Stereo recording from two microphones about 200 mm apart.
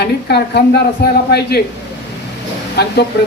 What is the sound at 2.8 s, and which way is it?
Speech, 55° left (ahead or behind).